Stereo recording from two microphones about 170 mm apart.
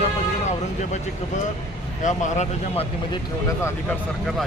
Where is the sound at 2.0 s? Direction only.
45° left (ahead or behind).